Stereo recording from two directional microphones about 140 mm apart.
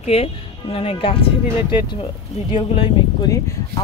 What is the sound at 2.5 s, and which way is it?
Speech, 40° left (ahead or behind).